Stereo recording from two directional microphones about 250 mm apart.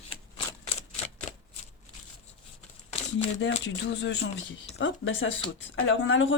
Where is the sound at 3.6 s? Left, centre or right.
Left.